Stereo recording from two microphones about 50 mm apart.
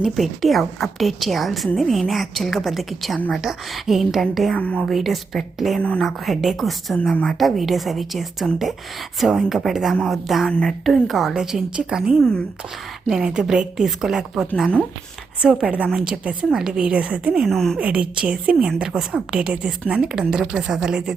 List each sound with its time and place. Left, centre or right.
0.0 s a woman's voice: centre
4.5 s a woman's voice: left
4.9 s a woman's voice: centre
11.3 s a woman's voice: centre
15.6 s a woman's voice: right
16.5 s a woman's voice: centre
17.4 s speech: centre
17.7 s a woman's voice: right